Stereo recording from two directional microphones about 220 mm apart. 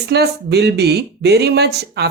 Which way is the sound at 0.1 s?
50° right (ahead or behind).